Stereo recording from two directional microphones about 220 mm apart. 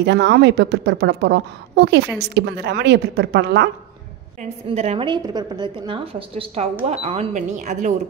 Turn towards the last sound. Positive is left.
turn(degrees=-35)  # may be behind; listen again after turning